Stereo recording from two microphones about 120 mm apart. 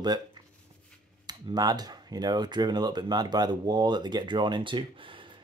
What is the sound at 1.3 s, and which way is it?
Speech, 35° right (ahead or behind).